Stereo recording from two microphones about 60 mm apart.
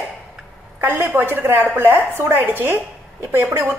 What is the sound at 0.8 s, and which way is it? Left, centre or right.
Speech, right.